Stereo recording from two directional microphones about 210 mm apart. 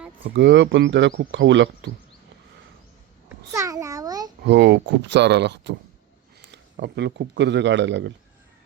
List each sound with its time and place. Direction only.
0.3 s speech: 60° right (ahead or behind)
3.2 s babbling: 15° right (ahead or behind)
4.4 s speech: 55° right (ahead or behind)